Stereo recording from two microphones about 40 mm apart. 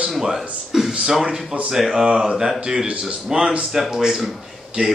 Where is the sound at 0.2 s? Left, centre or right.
Centre.